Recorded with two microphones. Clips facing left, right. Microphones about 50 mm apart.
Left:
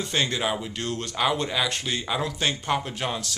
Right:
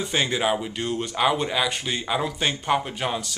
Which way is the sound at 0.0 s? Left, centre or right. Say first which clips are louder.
Right 2 dB; centre.